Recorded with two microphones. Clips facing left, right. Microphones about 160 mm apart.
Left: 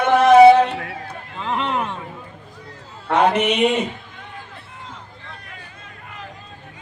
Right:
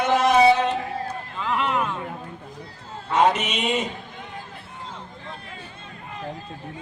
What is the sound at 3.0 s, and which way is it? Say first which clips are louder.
Speech: left 3 dB; 60° left (ahead or behind).